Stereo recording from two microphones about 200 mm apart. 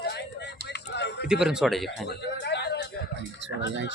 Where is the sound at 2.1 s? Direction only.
55° left (ahead or behind).